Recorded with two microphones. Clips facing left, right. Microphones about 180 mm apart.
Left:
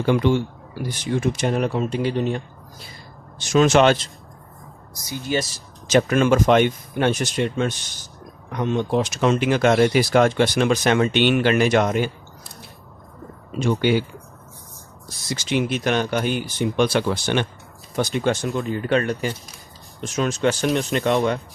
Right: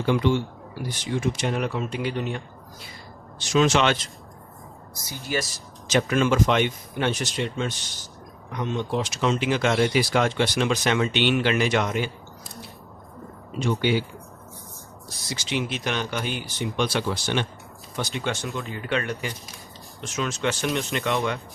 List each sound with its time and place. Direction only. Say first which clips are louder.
0.0 s speech: left 3 dB; 50° left (ahead or behind); by 2.4 s 35° left (ahead or behind)
3.3 s speech: left 5 dB; 50° left (ahead or behind)
5.0 s speech: left 5 dB; 20° left (ahead or behind)
5.9 s speech: left 5 dB; 50° left (ahead or behind)
13.6 s speech: left 4 dB; 50° left (ahead or behind)
15.3 s speech: left 6 dB; 50° left (ahead or behind)